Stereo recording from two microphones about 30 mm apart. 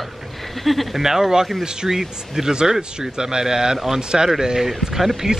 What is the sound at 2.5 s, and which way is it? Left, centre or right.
Speech, right.